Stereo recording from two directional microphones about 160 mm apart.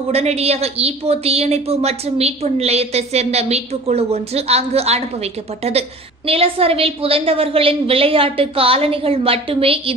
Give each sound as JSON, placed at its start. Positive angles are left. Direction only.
{"t": 0.1, "sound": "a woman's voice", "side_deg": -40}